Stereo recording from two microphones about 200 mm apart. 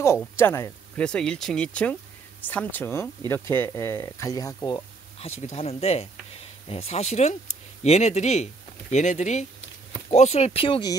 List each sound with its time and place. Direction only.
0.4 s speech: 15° left (ahead or behind)
5.4 s speech: 35° left (ahead or behind)